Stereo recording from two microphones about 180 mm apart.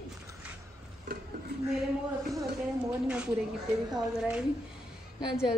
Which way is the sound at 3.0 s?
5° right (ahead or behind).